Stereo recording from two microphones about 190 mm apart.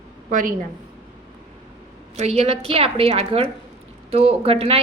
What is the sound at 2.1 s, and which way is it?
A woman's voice, 35° right (ahead or behind).